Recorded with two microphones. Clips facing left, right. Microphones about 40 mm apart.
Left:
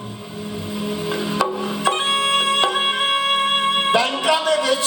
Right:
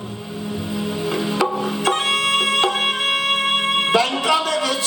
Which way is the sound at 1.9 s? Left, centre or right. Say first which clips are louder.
Left 1 dB; centre.